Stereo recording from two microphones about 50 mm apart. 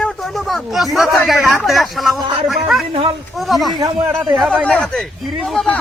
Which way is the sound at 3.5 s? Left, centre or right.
Centre.